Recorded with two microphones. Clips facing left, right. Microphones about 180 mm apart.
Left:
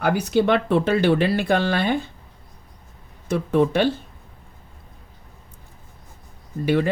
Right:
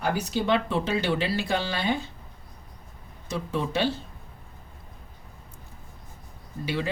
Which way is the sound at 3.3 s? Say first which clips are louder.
Left 9 dB; 55° left (ahead or behind).